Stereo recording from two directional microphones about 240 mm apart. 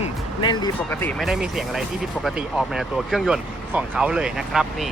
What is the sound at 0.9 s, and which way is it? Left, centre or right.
Speech, centre.